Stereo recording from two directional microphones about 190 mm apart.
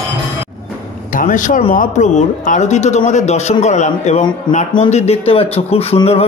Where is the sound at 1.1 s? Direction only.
45° left (ahead or behind).